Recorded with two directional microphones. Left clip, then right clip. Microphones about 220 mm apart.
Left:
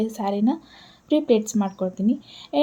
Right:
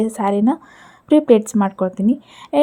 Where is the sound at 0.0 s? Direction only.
25° right (ahead or behind).